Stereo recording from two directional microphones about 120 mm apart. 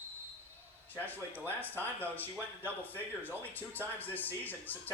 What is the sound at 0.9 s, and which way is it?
Speech, 15° left (ahead or behind).